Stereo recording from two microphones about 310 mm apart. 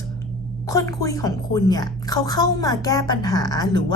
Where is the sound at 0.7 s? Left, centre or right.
Centre.